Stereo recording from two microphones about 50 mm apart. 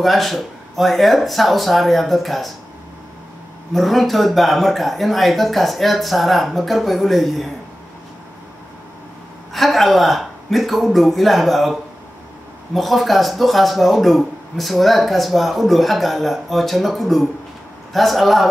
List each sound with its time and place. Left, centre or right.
0.0 s speech: centre
3.7 s speech: centre
9.5 s speech: centre